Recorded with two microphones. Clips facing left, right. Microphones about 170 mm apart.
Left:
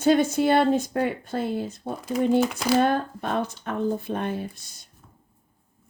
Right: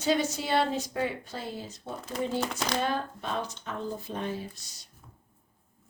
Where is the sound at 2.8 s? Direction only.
55° left (ahead or behind).